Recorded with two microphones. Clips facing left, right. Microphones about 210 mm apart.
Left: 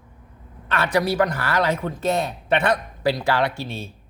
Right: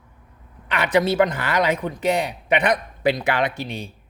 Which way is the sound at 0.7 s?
15° right (ahead or behind).